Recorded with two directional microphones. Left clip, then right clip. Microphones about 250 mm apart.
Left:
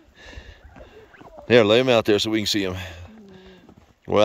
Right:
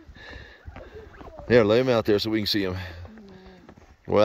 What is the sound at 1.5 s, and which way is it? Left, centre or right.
Speech, centre.